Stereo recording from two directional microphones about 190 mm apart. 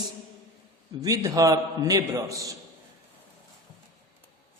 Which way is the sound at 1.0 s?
20° right (ahead or behind).